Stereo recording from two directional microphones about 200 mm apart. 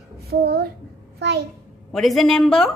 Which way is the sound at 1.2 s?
55° right (ahead or behind).